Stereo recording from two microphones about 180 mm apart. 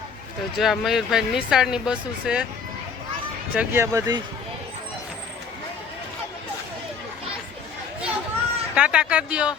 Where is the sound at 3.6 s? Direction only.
15° right (ahead or behind).